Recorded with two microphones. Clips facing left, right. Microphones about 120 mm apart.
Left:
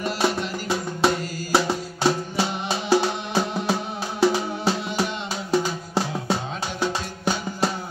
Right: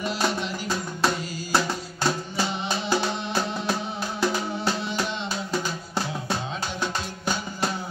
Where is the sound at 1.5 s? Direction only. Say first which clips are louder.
Left 4 dB; 25° left (ahead or behind).